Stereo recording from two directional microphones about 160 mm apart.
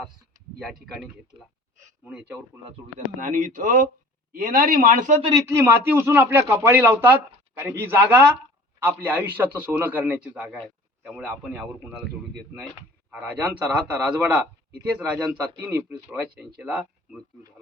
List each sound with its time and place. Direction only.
2.0 s a man's voice: 10° right (ahead or behind)
3.2 s speech: 55° right (ahead or behind)
5.2 s a man's voice: 20° right (ahead or behind)
13.1 s a man's voice: 10° right (ahead or behind)